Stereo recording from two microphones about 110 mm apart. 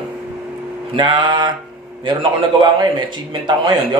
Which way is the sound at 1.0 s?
45° right (ahead or behind).